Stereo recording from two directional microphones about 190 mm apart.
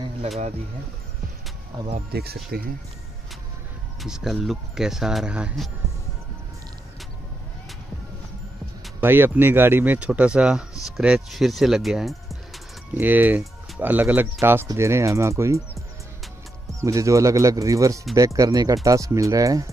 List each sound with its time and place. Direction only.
2.0 s speech: 55° right (ahead or behind)
4.0 s speech: centre (ahead or behind)
9.0 s speech: 10° right (ahead or behind)
16.8 s speech: 15° right (ahead or behind)